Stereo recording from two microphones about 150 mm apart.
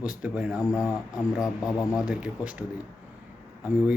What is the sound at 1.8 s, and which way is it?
Speech, 20° left (ahead or behind).